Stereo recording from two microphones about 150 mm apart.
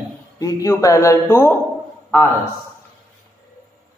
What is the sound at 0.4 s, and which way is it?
A man's voice, 20° left (ahead or behind).